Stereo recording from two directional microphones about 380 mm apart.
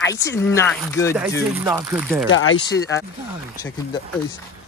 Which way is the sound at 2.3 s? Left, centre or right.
Left.